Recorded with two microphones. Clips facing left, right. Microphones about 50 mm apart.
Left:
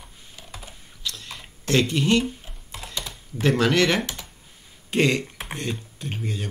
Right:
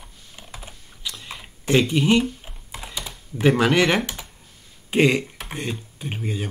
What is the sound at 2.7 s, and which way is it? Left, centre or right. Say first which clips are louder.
Computer keyboard: even; centre.